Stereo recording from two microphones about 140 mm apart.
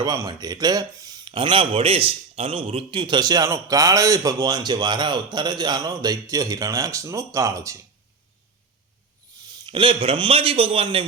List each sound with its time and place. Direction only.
0.0 s speech: 30° right (ahead or behind)
9.6 s a man's voice: 35° right (ahead or behind)